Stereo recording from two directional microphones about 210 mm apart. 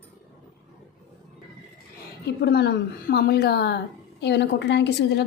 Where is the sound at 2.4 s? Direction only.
50° left (ahead or behind).